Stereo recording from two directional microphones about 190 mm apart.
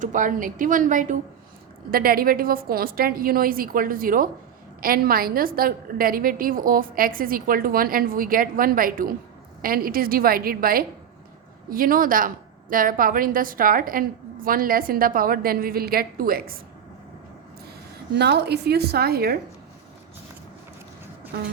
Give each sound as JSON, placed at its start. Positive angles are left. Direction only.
{"t": 0.0, "sound": "a woman's voice", "side_deg": -40}
{"t": 18.1, "sound": "a woman's voice", "side_deg": -60}